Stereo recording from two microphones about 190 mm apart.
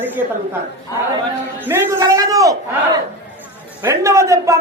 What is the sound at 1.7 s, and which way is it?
Speech, 10° right (ahead or behind).